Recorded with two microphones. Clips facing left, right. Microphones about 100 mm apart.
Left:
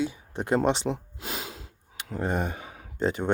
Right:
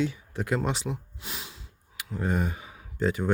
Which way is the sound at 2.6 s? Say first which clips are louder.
Left 3 dB; 45° left (ahead or behind).